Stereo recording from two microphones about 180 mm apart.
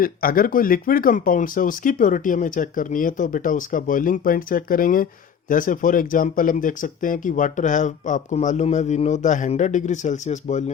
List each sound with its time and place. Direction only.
0.0 s speech: 55° left (ahead or behind)